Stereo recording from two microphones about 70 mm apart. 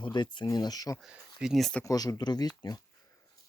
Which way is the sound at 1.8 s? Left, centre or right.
Left.